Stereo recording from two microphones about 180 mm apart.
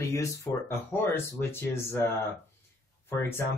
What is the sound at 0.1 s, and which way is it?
Speech, 15° left (ahead or behind).